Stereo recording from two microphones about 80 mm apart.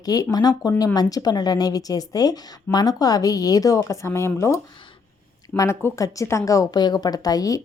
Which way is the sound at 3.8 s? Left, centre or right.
Left.